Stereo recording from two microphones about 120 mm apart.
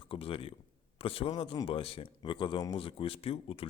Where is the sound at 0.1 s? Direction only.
50° left (ahead or behind).